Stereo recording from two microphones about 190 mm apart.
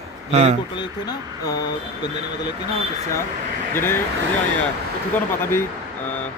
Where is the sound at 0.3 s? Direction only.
35° right (ahead or behind).